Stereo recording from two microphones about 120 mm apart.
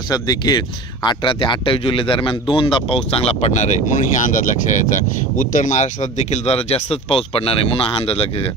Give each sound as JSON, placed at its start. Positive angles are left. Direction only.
{"t": 0.1, "sound": "speech", "side_deg": 35}
{"t": 1.0, "sound": "speech", "side_deg": 45}